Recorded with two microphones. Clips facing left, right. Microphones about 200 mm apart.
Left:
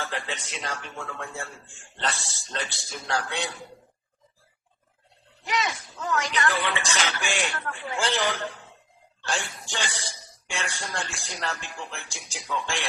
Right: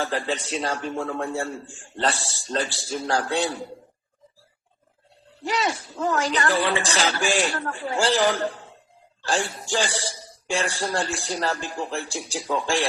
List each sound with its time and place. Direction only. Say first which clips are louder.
0.0 s speech: right 7 dB; 35° right (ahead or behind)
5.5 s speech: right 4 dB; 35° right (ahead or behind)